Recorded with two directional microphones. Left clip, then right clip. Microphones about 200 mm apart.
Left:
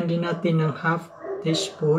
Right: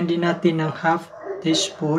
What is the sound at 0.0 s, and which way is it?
Speech, 60° right (ahead or behind).